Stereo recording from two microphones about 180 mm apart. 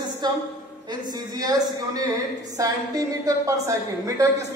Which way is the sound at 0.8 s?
25° right (ahead or behind).